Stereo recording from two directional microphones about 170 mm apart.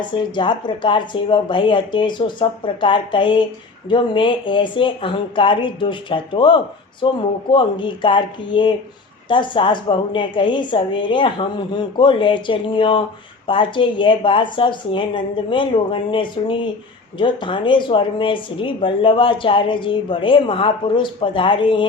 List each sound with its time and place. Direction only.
0.0 s speech: 25° left (ahead or behind)